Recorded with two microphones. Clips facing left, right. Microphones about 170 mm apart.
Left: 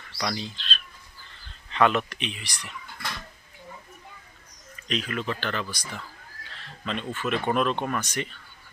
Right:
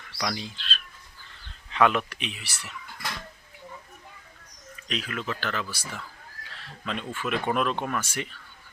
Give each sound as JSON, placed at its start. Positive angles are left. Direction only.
{"t": 0.2, "sound": "speech", "side_deg": -5}
{"t": 4.9, "sound": "speech", "side_deg": 0}